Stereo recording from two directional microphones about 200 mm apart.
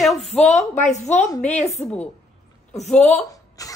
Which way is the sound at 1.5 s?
35° left (ahead or behind).